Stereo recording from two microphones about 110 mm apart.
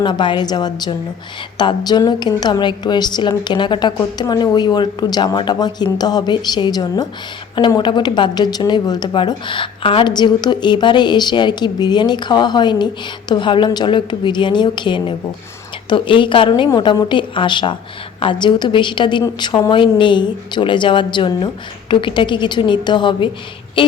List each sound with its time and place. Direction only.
0.0 s a woman's voice: 45° left (ahead or behind)
10.1 s a woman's voice: 40° left (ahead or behind)